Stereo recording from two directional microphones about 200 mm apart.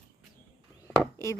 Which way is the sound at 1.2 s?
15° left (ahead or behind).